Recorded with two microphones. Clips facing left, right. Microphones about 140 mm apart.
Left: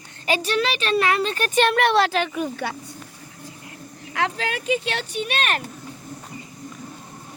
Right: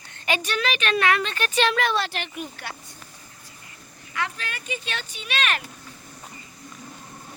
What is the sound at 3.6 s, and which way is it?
Speech, 80° left.